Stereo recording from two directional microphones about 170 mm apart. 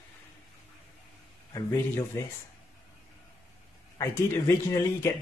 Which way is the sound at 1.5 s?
20° left (ahead or behind).